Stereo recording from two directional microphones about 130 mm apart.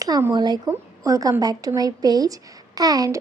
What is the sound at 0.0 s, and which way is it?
A woman's voice, 25° right (ahead or behind).